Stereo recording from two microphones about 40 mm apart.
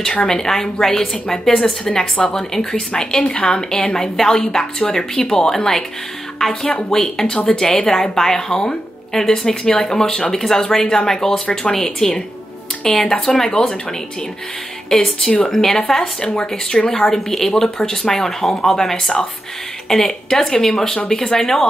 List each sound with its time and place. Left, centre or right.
0.3 s a woman's voice: centre
2.9 s a woman's voice: left; by 5.9 s centre
6.9 s a woman's voice: centre
14.9 s a woman's voice: centre
17.3 s a woman's voice: centre